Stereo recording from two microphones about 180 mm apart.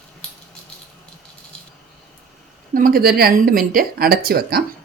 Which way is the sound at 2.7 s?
55° right (ahead or behind).